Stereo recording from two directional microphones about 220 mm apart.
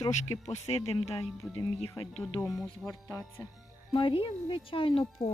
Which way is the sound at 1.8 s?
25° left (ahead or behind).